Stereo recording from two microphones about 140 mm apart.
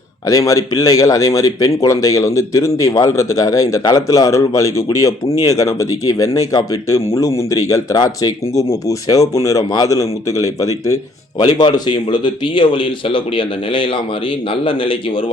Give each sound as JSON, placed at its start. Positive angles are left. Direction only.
{"t": 0.3, "sound": "a man's voice", "side_deg": 25}